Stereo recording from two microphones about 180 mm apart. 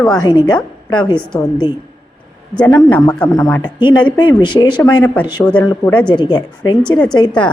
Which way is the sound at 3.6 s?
25° left (ahead or behind).